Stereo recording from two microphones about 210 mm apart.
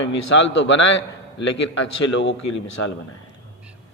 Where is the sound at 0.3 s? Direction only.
65° left (ahead or behind).